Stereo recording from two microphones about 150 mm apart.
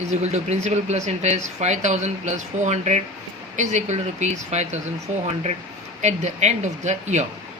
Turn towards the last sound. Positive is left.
turn(degrees=-50)  # may be behind; listen again after turning